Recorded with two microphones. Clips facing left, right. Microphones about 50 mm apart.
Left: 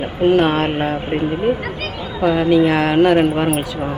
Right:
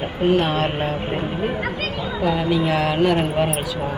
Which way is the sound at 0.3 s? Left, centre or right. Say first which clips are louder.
Left 5 dB; left.